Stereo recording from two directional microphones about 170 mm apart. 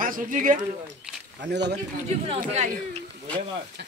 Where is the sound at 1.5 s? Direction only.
90° right.